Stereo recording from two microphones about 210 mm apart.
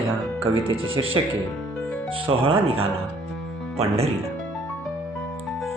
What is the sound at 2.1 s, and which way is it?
Speech, 25° right (ahead or behind).